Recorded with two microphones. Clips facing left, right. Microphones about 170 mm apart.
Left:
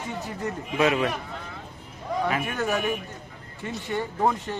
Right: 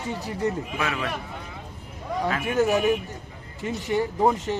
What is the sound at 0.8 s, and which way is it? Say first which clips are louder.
Speech: left 8 dB; 20° left (ahead or behind).